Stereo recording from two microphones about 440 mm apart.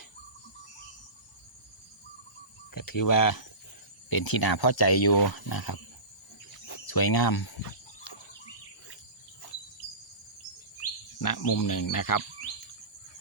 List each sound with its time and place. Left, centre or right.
2.7 s speech: left
11.2 s speech: left